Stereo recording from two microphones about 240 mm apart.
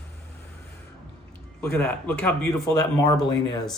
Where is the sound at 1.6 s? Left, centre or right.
Centre.